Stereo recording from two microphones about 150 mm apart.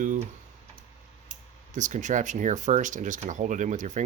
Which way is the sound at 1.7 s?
55° right (ahead or behind).